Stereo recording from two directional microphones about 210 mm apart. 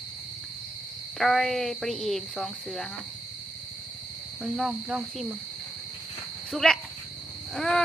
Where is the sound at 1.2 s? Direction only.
Centre (ahead or behind).